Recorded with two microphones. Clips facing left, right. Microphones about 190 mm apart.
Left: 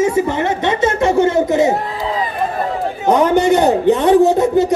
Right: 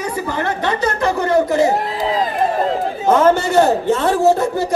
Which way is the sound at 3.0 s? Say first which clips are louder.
Left 1 dB; 15° left (ahead or behind).